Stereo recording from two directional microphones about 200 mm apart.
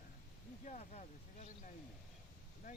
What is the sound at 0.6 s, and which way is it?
Speech, 35° left (ahead or behind).